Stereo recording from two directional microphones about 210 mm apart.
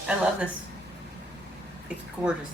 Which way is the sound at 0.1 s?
5° right (ahead or behind).